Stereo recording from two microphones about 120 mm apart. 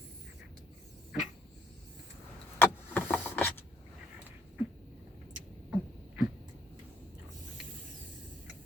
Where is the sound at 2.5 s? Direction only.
15° left (ahead or behind).